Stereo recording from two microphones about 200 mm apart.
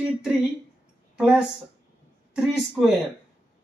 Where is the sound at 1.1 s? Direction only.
5° right (ahead or behind).